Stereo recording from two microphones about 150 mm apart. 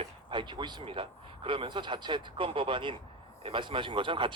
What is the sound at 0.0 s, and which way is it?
Speech, 35° right (ahead or behind).